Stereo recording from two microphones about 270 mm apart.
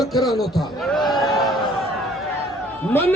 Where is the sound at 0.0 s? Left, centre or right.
Centre.